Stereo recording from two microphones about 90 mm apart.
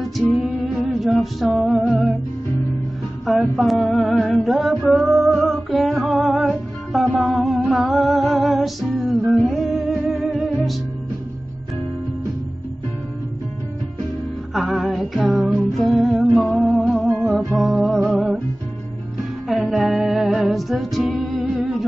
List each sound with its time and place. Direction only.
0.4 s music: centre (ahead or behind)
3.3 s a sound: centre (ahead or behind)
4.3 s music: centre (ahead or behind)
14.5 s music: centre (ahead or behind)
19.4 s music: centre (ahead or behind)